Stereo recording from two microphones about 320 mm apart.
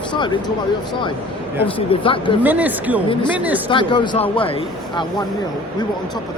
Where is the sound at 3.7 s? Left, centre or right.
Centre.